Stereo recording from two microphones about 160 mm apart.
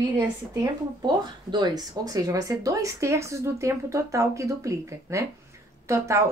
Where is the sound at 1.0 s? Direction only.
25° right (ahead or behind).